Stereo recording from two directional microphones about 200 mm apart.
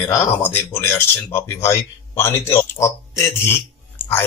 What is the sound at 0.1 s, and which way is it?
Speech, 10° left (ahead or behind).